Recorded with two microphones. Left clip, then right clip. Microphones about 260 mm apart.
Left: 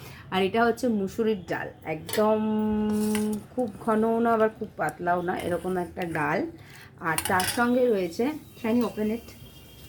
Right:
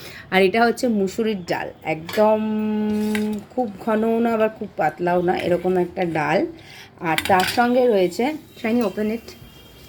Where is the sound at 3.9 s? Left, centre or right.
Right.